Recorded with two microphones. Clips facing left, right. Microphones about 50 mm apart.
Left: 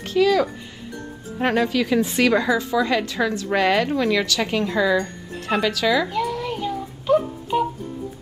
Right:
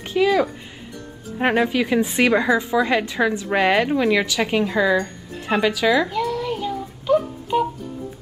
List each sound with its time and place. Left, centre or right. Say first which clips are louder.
0.0 s a woman's voice: even; centre
6.0 s babbling: right 1 dB; centre